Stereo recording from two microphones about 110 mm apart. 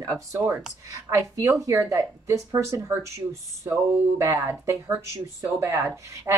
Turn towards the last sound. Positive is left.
turn(degrees=-25)  # may be behind; listen again after turning